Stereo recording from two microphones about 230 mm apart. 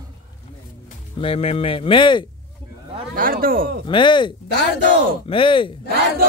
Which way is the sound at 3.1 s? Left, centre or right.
Right.